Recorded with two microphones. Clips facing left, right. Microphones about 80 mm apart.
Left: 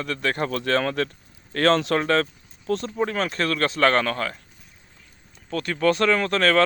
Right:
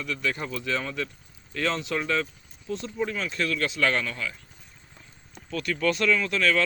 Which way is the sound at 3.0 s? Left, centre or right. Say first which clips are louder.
Left 2 dB; left.